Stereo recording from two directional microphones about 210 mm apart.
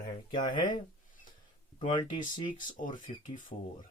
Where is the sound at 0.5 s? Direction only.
20° left (ahead or behind).